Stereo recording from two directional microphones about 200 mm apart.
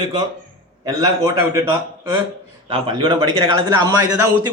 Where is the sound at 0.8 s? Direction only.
15° right (ahead or behind).